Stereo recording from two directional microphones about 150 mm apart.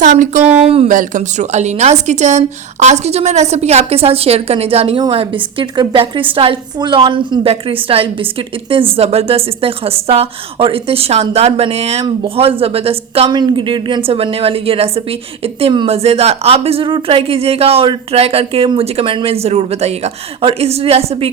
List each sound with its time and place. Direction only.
0.0 s speech: 60° right (ahead or behind)
0.4 s speech: 10° right (ahead or behind)
0.9 s a woman's voice: 55° right (ahead or behind)